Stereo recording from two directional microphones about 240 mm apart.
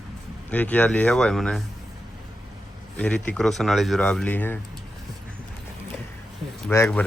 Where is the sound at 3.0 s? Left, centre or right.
Centre.